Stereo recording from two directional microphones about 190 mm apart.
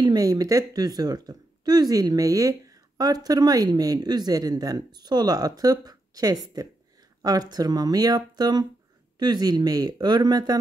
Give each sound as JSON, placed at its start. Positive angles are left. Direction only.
{"t": 0.0, "sound": "a woman's voice", "side_deg": -20}